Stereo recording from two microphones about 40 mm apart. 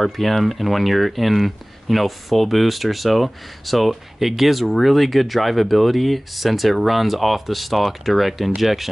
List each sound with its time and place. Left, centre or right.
0.0 s speech: centre